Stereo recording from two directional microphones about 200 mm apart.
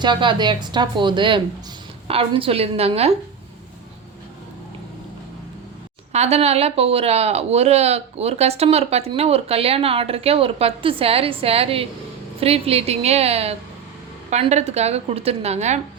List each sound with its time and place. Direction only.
0.0 s speech: 25° right (ahead or behind)
6.1 s a woman's voice: 30° right (ahead or behind)